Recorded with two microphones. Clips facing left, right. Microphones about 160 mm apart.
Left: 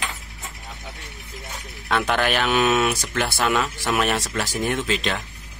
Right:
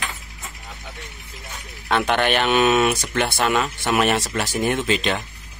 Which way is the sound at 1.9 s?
Centre (ahead or behind).